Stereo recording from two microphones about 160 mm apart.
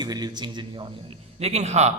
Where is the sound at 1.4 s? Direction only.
45° right (ahead or behind).